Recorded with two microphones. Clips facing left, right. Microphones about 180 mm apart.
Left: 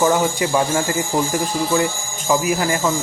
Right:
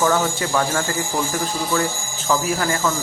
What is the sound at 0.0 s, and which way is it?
Speech, 15° left (ahead or behind).